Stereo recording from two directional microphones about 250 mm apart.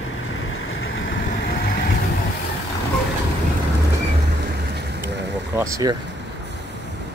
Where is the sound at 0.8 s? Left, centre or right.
Left.